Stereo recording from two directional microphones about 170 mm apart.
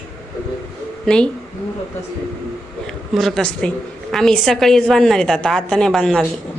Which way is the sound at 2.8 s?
Centre (ahead or behind).